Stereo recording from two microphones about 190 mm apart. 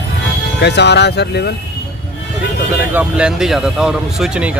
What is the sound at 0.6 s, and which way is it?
Speech, 65° left (ahead or behind).